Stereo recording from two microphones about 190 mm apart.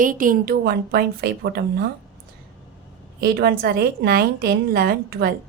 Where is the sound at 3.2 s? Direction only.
55° right (ahead or behind).